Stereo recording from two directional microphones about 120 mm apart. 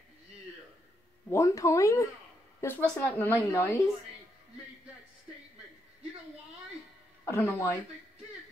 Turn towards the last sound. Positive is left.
turn(degrees=20)  # may be behind; listen again after turning